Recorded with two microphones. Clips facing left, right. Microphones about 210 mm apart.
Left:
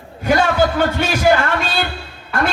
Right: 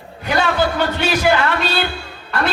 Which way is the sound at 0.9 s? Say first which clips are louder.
Even; 50° left (ahead or behind).